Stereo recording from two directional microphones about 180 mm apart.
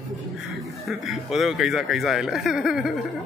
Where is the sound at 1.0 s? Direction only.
Centre (ahead or behind).